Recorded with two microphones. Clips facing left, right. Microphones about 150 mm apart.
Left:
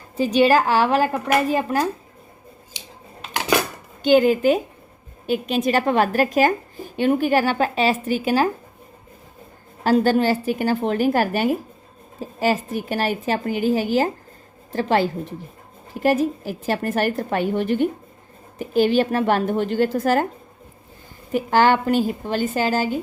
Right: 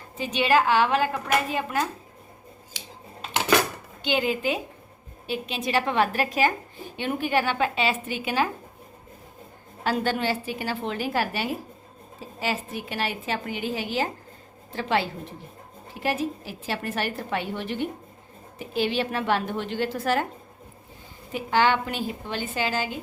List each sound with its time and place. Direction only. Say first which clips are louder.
0.2 s a woman's voice: left 6 dB; 40° left (ahead or behind)
4.0 s a woman's voice: left 10 dB; 45° left (ahead or behind)
9.8 s a woman's voice: left 8 dB; 40° left (ahead or behind)
21.3 s a woman's voice: left 5 dB; 45° left (ahead or behind)